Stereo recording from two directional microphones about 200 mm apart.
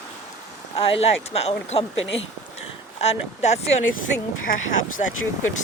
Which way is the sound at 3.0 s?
35° left (ahead or behind).